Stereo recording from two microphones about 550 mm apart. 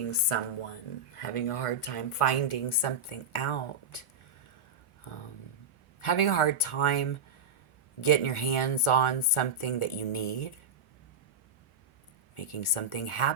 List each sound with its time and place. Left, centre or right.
0.1 s speech: left
6.0 s speech: left
12.3 s speech: left